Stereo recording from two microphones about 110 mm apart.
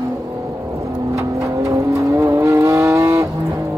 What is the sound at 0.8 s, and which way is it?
Vehicle, 30° right (ahead or behind).